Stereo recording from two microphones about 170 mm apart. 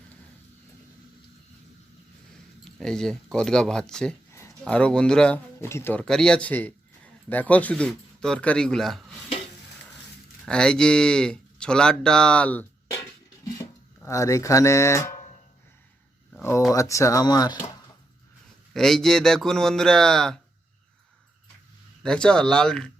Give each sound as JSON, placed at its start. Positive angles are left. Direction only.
{"t": 2.7, "sound": "a man's voice", "side_deg": 5}
{"t": 4.3, "sound": "a sound", "side_deg": 15}
{"t": 4.6, "sound": "speech", "side_deg": 5}
{"t": 10.4, "sound": "speech", "side_deg": 5}
{"t": 16.4, "sound": "speech", "side_deg": 15}
{"t": 18.7, "sound": "a man's voice", "side_deg": 5}
{"t": 22.0, "sound": "a man's voice", "side_deg": 5}